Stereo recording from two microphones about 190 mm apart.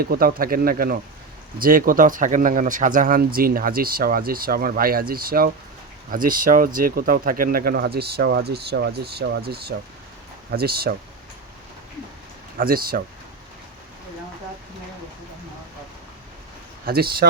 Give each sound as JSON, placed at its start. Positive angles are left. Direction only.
{"t": 0.0, "sound": "speech", "side_deg": -50}
{"t": 12.5, "sound": "speech", "side_deg": -50}
{"t": 16.8, "sound": "speech", "side_deg": -55}